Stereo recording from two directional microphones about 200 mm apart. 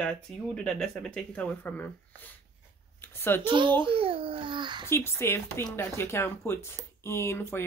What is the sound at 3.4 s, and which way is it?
A child's voice, 25° right (ahead or behind).